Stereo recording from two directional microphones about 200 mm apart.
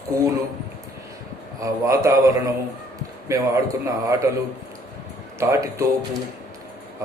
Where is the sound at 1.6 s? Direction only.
15° right (ahead or behind).